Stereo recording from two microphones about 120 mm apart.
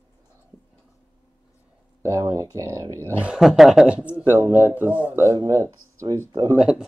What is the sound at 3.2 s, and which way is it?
Speech, 5° right (ahead or behind).